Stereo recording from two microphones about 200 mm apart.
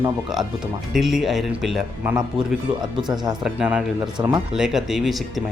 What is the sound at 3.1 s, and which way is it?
Speech, 20° right (ahead or behind).